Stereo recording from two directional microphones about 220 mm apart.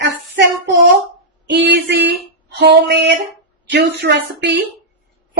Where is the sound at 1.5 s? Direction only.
50° right (ahead or behind).